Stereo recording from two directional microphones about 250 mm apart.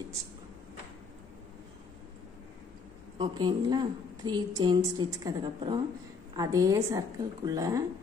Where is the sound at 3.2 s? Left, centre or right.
Centre.